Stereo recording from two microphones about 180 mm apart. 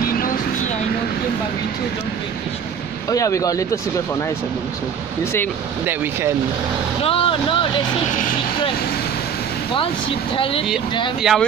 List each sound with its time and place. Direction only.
3.1 s speech: 15° left (ahead or behind)
7.0 s speech: 30° left (ahead or behind)
10.3 s speech: 30° left (ahead or behind)
11.3 s speech: 5° right (ahead or behind)